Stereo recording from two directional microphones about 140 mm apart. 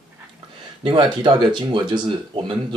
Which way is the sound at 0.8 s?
35° right (ahead or behind).